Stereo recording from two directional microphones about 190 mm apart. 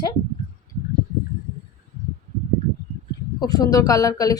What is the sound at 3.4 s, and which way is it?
Speech, 20° left (ahead or behind).